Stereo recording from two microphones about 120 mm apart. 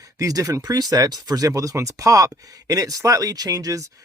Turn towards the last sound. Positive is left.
turn(degrees=-30)  # may be behind; listen again after turning